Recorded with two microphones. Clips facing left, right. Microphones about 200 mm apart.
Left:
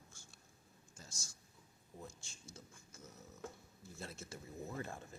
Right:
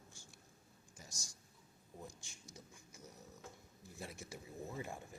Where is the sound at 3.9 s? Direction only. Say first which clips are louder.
Even; 15° right (ahead or behind).